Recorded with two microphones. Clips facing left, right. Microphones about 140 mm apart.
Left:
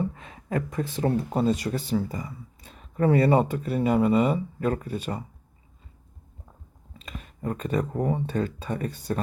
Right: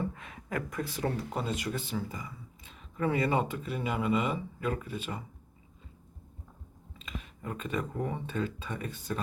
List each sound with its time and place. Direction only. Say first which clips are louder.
0.1 s speech: left 6 dB; 30° left (ahead or behind)
7.0 s speech: left 7 dB; 40° left (ahead or behind)